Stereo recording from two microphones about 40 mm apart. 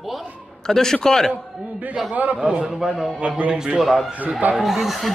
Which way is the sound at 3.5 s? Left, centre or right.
Centre.